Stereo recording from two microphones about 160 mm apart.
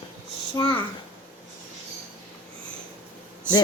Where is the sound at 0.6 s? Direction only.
30° left (ahead or behind).